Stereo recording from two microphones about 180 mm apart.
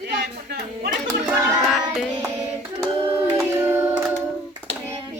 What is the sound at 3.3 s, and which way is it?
Choir, 10° right (ahead or behind).